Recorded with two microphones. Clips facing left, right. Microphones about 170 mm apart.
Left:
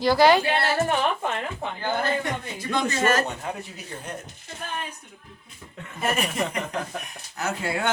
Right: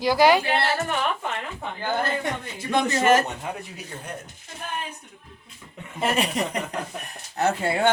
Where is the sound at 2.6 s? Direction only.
20° right (ahead or behind).